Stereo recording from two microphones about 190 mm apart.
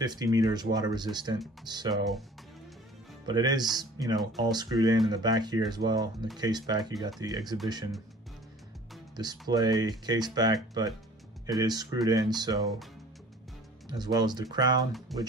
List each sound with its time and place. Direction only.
0.0 s speech: 20° right (ahead or behind)
3.3 s speech: 20° right (ahead or behind)
9.1 s speech: 20° right (ahead or behind)
13.8 s speech: 20° right (ahead or behind)
14.9 s speech: centre (ahead or behind)